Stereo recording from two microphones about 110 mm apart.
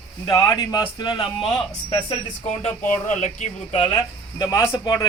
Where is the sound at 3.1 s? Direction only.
90° left; by 3.9 s 70° left (ahead or behind).